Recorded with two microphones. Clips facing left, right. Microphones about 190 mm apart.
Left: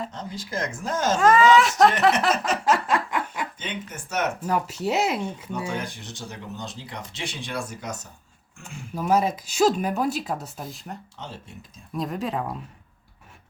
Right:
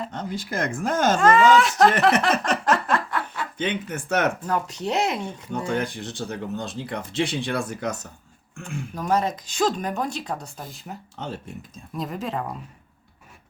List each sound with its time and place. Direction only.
0.1 s speech: 60° right (ahead or behind)
1.2 s speech: centre (ahead or behind)
2.4 s a sound: 5° left (ahead or behind)
3.6 s speech: 60° right (ahead or behind)
4.4 s speech: 5° left (ahead or behind)
5.5 s speech: 55° right (ahead or behind)
8.6 s speech: 5° left (ahead or behind)
11.9 s speech: centre (ahead or behind)